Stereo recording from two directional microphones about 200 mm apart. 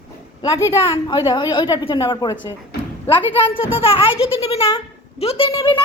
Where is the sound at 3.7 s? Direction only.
25° left (ahead or behind).